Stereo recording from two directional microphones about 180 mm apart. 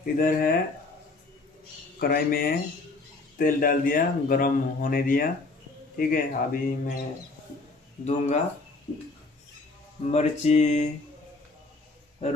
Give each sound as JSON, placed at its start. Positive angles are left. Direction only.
{"t": 0.0, "sound": "speech", "side_deg": 50}
{"t": 2.0, "sound": "speech", "side_deg": 55}
{"t": 8.0, "sound": "mantra", "side_deg": 40}
{"t": 10.0, "sound": "mantra", "side_deg": 40}
{"t": 12.2, "sound": "speech", "side_deg": 35}